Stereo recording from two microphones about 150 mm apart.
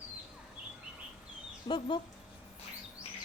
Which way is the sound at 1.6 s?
30° left (ahead or behind).